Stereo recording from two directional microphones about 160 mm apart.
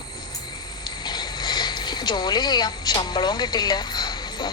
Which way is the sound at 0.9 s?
25° left (ahead or behind).